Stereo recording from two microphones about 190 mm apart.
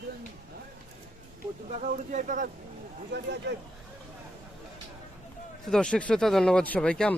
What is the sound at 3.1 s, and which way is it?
Speech, 65° right (ahead or behind).